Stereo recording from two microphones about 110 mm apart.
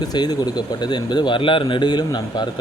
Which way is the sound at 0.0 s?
40° left (ahead or behind).